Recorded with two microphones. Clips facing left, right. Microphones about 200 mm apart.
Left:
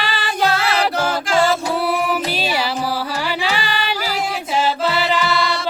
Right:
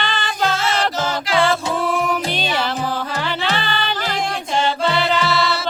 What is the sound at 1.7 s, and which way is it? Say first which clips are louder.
Music: left 1 dB; 10° left (ahead or behind).